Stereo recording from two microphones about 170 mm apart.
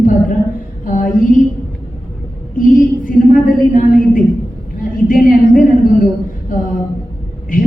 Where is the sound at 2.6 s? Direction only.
55° left (ahead or behind).